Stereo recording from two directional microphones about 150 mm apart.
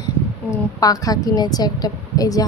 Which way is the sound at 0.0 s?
25° left (ahead or behind).